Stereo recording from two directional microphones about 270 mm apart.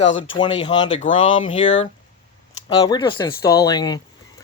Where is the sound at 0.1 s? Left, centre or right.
Left.